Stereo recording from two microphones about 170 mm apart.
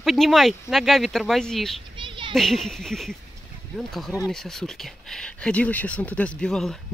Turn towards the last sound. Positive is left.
turn(degrees=5)  # may be behind; listen again after turning